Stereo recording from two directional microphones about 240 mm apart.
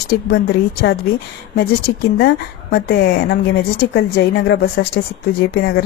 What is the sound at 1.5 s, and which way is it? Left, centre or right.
A woman's voice, left.